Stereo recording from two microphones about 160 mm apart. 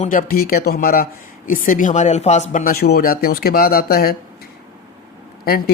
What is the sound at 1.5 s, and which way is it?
Speech, 55° left (ahead or behind).